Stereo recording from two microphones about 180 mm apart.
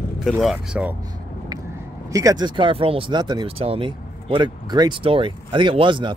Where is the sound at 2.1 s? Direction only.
20° right (ahead or behind).